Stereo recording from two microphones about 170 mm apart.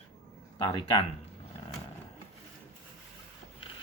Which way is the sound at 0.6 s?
30° left (ahead or behind).